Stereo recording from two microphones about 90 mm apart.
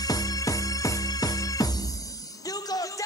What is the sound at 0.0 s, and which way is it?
Music, 45° left (ahead or behind).